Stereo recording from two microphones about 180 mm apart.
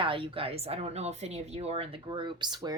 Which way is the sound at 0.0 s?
30° right (ahead or behind).